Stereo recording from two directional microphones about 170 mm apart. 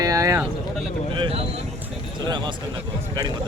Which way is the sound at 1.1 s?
30° right (ahead or behind).